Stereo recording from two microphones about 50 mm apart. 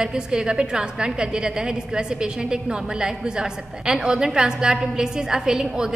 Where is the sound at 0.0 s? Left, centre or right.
Centre.